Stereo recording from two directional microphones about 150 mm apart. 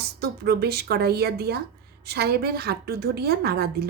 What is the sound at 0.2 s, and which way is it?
A woman's voice, 90° right.